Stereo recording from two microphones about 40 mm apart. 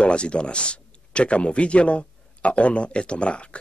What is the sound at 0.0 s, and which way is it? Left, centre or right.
Speech, left.